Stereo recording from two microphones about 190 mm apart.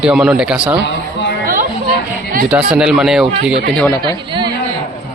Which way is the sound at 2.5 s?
5° right (ahead or behind).